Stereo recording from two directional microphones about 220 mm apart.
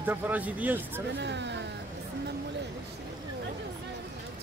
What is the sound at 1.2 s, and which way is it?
Speech, 50° right (ahead or behind).